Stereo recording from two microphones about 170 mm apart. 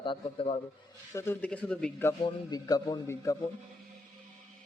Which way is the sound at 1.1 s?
15° left (ahead or behind).